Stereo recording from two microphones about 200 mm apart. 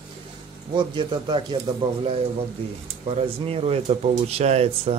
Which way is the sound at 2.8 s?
30° right (ahead or behind).